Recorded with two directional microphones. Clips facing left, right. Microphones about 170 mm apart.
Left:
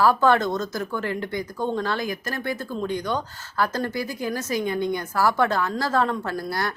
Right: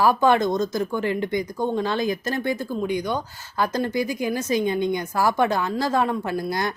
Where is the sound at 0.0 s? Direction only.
15° right (ahead or behind).